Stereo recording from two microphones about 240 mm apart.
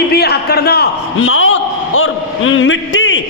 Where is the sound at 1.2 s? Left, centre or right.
Left.